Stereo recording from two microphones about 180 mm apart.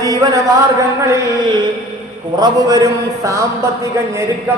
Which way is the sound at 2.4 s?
20° right (ahead or behind).